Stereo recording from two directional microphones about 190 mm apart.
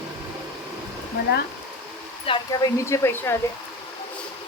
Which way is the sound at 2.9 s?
15° left (ahead or behind).